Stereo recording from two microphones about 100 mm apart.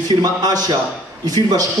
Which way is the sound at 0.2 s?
40° right (ahead or behind).